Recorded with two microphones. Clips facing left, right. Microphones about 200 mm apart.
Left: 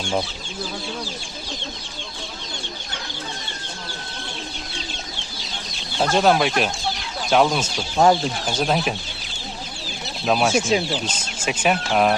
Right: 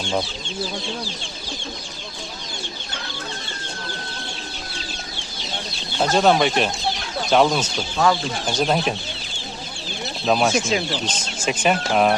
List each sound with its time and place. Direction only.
0.0 s speech: 10° left (ahead or behind)
6.0 s speech: 5° left (ahead or behind)
7.9 s speech: 30° left (ahead or behind)
8.4 s speech: centre (ahead or behind)
10.2 s speech: 5° left (ahead or behind)